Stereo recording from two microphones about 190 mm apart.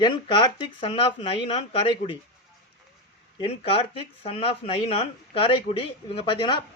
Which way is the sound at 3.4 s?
30° left (ahead or behind).